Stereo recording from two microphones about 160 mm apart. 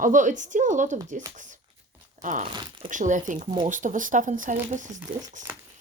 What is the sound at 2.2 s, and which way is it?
Crumpling, 55° right (ahead or behind).